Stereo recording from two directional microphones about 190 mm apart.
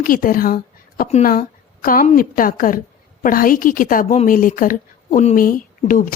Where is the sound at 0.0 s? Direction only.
50° left (ahead or behind).